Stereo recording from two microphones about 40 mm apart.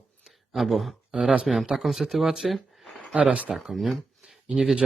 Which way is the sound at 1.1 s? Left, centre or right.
Right.